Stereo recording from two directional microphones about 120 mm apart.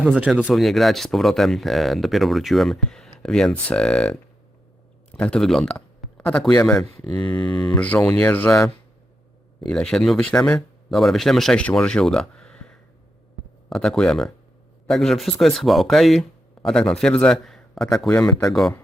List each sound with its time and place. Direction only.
0.0 s speech: 5° right (ahead or behind)
0.5 s a man's voice: centre (ahead or behind)
6.9 s speech: 45° left (ahead or behind)
7.2 s speech: 5° left (ahead or behind)